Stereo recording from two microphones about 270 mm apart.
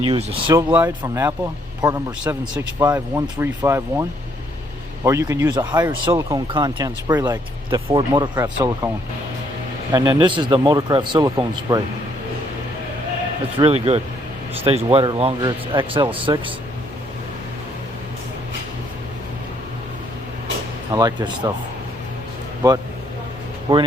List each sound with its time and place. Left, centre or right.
0.1 s speech: right
5.0 s speech: centre
9.9 s speech: centre
13.6 s speech: right
20.9 s speech: centre
22.6 s speech: centre